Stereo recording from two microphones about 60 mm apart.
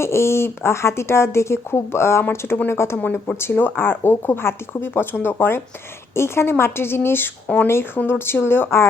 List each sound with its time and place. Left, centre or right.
0.0 s speech: left
3.0 s speech: left
7.4 s speech: left
8.3 s speech: left